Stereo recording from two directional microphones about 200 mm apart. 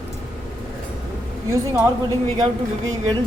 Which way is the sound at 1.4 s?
15° right (ahead or behind).